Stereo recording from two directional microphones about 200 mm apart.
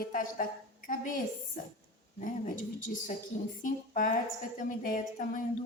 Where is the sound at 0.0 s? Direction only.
40° left (ahead or behind).